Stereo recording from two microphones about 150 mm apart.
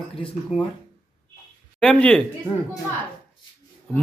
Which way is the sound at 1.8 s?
5° left (ahead or behind).